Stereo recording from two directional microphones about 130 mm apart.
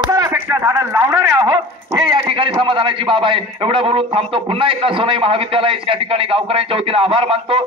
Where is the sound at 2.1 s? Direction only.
40° right (ahead or behind).